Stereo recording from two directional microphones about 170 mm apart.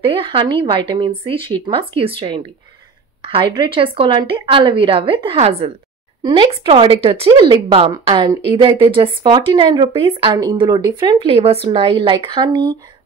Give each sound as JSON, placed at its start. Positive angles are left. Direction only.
{"t": 0.0, "sound": "a woman's voice", "side_deg": -30}